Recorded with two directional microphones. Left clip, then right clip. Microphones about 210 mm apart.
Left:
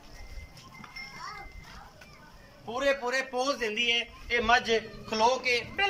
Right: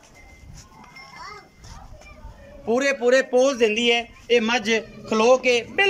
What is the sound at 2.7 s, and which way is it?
A man's voice, 50° right (ahead or behind).